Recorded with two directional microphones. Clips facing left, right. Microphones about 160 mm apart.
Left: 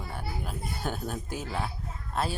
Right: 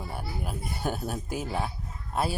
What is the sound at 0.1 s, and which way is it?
Speech, 10° right (ahead or behind).